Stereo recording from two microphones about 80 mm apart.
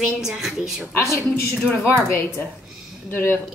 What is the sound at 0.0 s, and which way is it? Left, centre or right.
Speech, centre.